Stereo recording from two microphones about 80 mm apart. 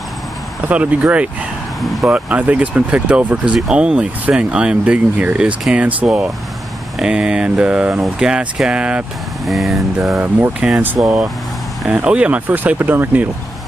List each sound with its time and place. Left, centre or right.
0.7 s speech: centre
9.5 s a sound: centre
10.6 s speech: centre